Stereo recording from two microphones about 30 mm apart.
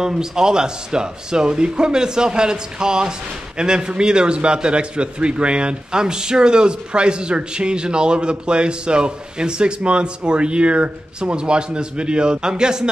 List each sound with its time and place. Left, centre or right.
0.0 s speech: right
11.1 s speech: right